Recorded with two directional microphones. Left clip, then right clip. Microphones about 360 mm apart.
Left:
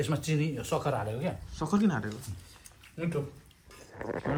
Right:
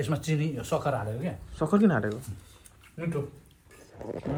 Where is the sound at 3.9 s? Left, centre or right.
Centre.